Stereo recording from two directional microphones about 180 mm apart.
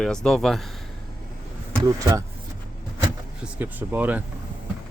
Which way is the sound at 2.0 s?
20° right (ahead or behind).